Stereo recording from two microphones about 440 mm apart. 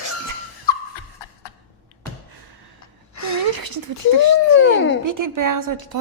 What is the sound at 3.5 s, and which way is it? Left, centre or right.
Speech, right.